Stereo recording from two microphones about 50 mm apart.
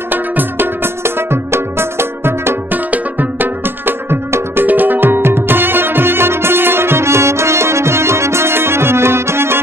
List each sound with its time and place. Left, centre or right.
0.1 s music: right
2.7 s music: right
4.6 s music: right